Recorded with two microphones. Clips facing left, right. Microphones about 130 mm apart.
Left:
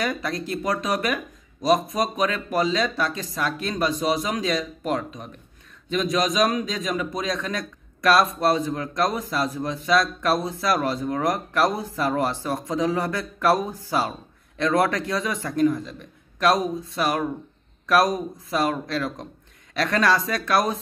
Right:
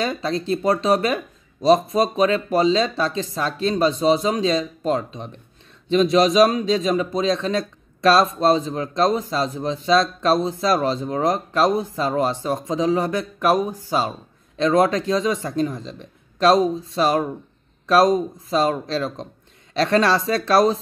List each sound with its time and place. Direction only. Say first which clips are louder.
0.0 s a man's voice: right 3 dB; 25° right (ahead or behind)